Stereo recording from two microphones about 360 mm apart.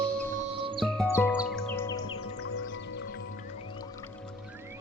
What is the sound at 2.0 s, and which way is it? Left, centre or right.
Music, left.